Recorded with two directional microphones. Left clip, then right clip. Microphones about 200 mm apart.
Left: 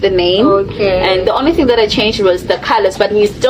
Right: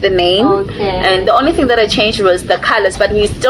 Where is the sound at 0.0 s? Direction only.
25° left (ahead or behind).